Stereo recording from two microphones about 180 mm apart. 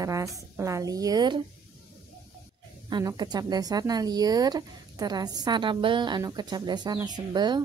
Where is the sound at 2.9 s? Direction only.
25° right (ahead or behind).